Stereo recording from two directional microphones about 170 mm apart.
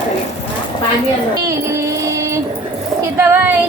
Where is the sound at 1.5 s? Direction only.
15° right (ahead or behind).